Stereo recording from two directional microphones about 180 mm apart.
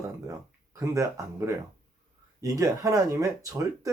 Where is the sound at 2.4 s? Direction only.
20° right (ahead or behind).